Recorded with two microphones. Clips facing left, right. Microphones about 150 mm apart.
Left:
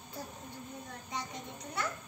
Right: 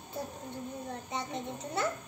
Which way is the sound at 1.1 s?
25° right (ahead or behind).